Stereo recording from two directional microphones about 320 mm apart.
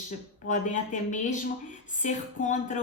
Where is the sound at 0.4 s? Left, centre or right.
Left.